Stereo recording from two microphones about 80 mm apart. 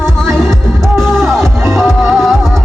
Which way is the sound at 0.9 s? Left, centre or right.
Centre.